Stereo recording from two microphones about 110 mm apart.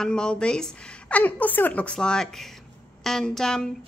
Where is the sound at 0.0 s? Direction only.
5° left (ahead or behind).